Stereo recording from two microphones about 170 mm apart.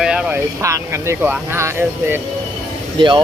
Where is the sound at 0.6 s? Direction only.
15° right (ahead or behind).